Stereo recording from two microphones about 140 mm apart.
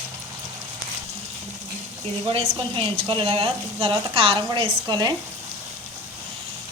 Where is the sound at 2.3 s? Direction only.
40° right (ahead or behind).